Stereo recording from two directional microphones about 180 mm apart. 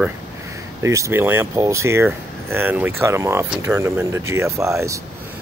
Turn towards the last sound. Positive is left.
turn(degrees=-15)  # may be behind; listen again after turning